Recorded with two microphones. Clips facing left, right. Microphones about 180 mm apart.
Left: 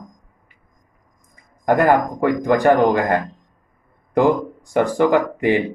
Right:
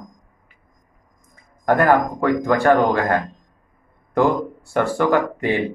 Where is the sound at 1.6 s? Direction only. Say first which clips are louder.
Left 1 dB; 15° left (ahead or behind).